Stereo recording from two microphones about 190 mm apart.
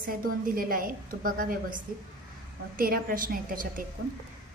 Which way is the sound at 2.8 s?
50° right (ahead or behind).